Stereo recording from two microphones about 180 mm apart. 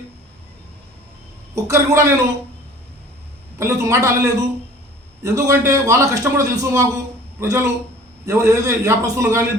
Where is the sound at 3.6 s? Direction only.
15° right (ahead or behind).